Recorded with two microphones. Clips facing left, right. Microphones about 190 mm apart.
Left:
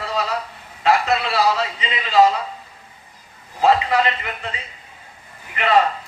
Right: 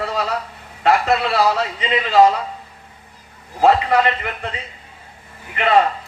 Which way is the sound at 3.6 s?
50° right (ahead or behind).